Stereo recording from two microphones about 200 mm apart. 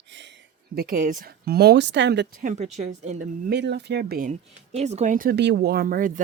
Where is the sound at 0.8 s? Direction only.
45° right (ahead or behind); by 2.2 s 60° right (ahead or behind).